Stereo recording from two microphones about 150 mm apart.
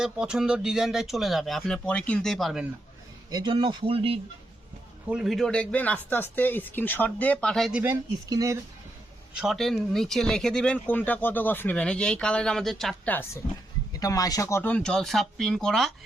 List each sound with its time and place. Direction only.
0.0 s speech: 5° right (ahead or behind)
3.2 s speech: 30° right (ahead or behind)
5.0 s speech: 5° right (ahead or behind)
8.3 s speech: 20° right (ahead or behind)
9.3 s speech: 5° right (ahead or behind)
13.9 s speech: 25° left (ahead or behind); by 15.9 s centre (ahead or behind)